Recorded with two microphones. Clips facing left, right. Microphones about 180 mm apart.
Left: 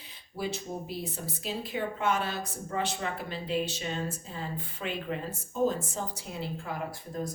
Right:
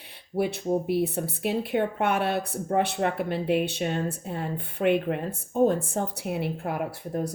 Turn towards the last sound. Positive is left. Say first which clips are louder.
# right 5 dB
turn(degrees=-65)  # may be behind; listen again after turning